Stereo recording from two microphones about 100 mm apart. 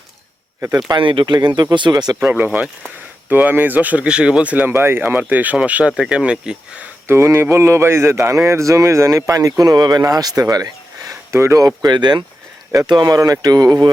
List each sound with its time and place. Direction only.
0.9 s speech: 55° right (ahead or behind)
2.2 s speech: 15° right (ahead or behind)
7.1 s speech: 25° right (ahead or behind)
11.3 s speech: 30° right (ahead or behind)